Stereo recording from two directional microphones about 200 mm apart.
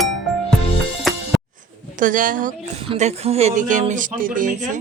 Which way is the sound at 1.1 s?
Centre (ahead or behind).